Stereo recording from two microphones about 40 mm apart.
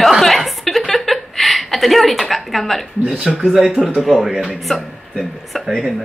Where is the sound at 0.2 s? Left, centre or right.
Centre.